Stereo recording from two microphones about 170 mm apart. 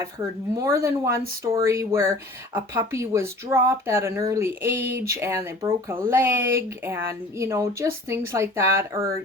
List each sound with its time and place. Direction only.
0.0 s speech: 15° right (ahead or behind)